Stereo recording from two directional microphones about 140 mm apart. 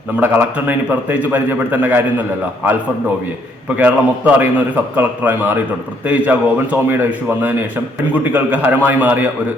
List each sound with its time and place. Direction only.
0.2 s a man's voice: 15° right (ahead or behind)
3.8 s a man's voice: 10° right (ahead or behind)
8.1 s a man's voice: 10° right (ahead or behind)